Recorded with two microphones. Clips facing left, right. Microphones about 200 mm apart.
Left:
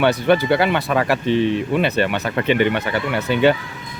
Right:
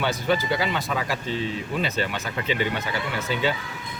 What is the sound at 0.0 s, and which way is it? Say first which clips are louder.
Speech: left 8 dB; 65° left (ahead or behind).